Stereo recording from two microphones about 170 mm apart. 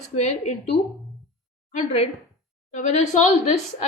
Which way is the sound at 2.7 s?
45° left (ahead or behind).